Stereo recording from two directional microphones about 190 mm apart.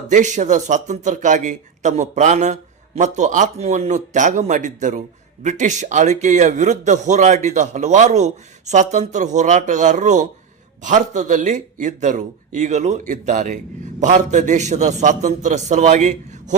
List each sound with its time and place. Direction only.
0.1 s a man's voice: 40° right (ahead or behind)